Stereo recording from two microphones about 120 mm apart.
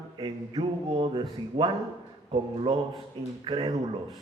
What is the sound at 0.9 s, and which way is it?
A man's voice, 45° right (ahead or behind).